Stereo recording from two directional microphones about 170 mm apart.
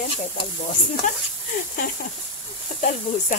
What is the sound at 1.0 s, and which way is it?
Speech, 45° left (ahead or behind).